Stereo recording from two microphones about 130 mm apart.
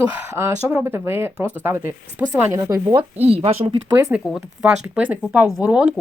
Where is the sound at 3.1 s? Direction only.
50° right (ahead or behind).